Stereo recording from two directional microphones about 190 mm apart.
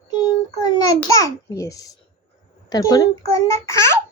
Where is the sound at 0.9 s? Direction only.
15° left (ahead or behind).